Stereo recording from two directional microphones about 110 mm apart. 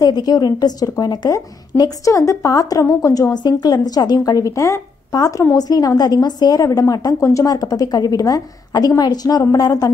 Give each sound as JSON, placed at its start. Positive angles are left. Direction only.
{"t": 0.0, "sound": "a woman's voice", "side_deg": 35}